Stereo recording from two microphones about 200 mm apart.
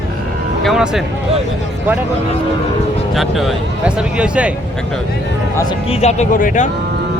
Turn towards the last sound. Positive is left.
turn(degrees=40)  # may be behind; listen again after turning